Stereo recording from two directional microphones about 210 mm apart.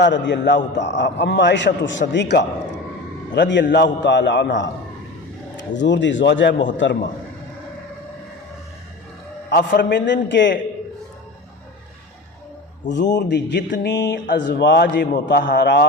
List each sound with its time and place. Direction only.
0.0 s a man's voice: 60° left (ahead or behind)
9.5 s a man's voice: 55° left (ahead or behind)
13.1 s a man's voice: 55° left (ahead or behind)